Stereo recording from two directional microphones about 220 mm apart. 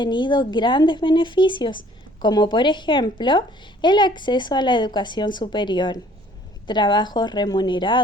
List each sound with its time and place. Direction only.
0.0 s a woman's voice: 20° left (ahead or behind)